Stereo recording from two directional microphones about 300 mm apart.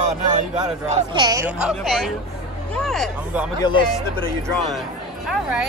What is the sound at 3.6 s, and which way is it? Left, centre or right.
Speech, centre.